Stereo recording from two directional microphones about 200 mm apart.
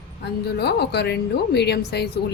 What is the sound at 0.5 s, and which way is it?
A woman's voice, 55° left (ahead or behind).